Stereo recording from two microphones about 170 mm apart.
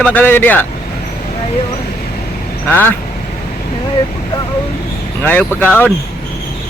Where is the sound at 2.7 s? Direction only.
10° left (ahead or behind).